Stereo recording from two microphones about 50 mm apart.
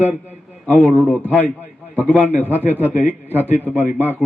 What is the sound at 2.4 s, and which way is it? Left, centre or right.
A man's voice, right.